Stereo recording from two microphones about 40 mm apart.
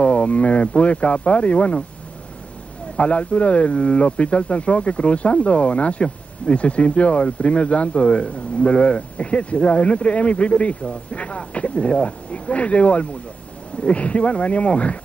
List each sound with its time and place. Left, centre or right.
0.0 s speech: left
3.0 s speech: left